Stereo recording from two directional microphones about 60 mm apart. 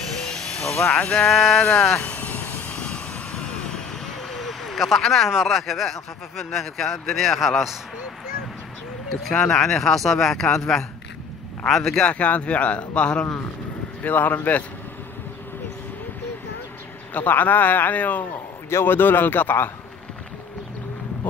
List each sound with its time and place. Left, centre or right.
0.7 s speech: centre
2.0 s vehicle: left
2.8 s vehicle: centre
5.3 s speech: centre
9.1 s speech: centre
11.6 s speech: centre
12.0 s a man's voice: left
14.0 s a man's voice: left
17.1 s a man's voice: left
18.7 s a man's voice: left